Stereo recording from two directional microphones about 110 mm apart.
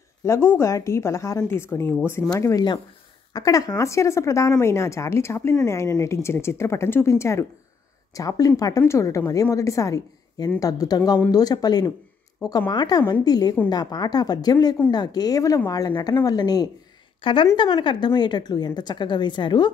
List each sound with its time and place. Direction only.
0.2 s a woman's voice: 25° left (ahead or behind)
17.2 s a woman's voice: 50° left (ahead or behind)